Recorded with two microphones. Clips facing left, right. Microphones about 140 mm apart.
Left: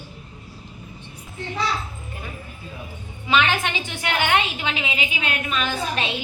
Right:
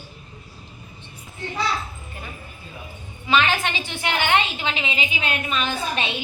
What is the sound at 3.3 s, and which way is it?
A woman's voice, 15° left (ahead or behind).